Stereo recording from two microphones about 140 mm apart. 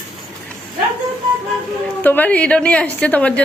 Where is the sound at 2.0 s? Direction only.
15° left (ahead or behind).